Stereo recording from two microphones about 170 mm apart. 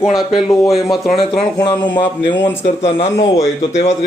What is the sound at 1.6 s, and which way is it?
A man's voice, 25° left (ahead or behind).